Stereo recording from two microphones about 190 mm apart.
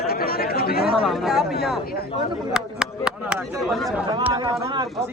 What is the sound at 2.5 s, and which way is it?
Speech, 5° right (ahead or behind).